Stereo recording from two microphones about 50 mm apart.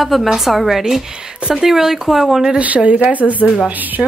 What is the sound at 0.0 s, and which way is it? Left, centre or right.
A woman's voice, centre.